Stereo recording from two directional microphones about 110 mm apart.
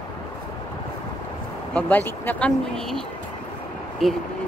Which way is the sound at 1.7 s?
15° left (ahead or behind).